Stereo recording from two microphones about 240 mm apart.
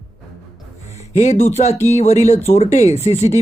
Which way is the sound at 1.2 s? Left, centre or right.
Left.